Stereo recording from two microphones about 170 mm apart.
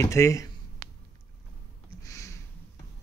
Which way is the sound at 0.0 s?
15° left (ahead or behind).